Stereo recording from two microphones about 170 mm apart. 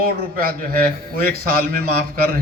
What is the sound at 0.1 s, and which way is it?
Speech, 60° right (ahead or behind).